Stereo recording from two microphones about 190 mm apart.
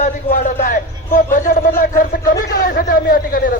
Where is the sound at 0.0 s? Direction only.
45° left (ahead or behind).